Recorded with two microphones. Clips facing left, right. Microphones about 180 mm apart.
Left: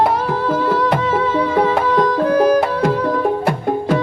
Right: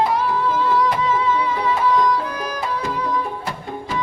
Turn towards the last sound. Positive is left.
turn(degrees=55)  # may be behind; listen again after turning